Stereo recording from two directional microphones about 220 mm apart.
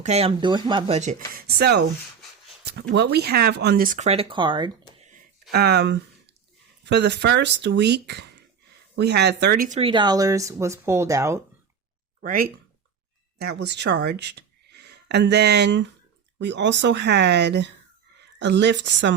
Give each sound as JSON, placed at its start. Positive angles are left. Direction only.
{"t": 0.0, "sound": "speech", "side_deg": -30}
{"t": 2.9, "sound": "speech", "side_deg": -50}
{"t": 5.0, "sound": "a sound", "side_deg": -40}
{"t": 6.8, "sound": "speech", "side_deg": -50}
{"t": 12.2, "sound": "speech", "side_deg": -40}